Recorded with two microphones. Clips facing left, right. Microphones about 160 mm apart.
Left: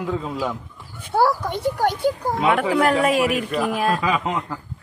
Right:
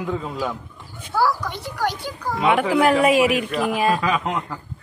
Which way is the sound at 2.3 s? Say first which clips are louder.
Right 4 dB; centre (ahead or behind).